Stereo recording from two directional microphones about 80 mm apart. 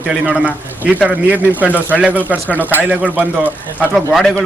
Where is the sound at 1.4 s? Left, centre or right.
Left.